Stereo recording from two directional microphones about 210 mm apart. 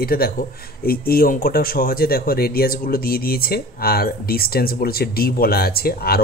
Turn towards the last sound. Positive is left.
turn(degrees=45)  # may be behind; listen again after turning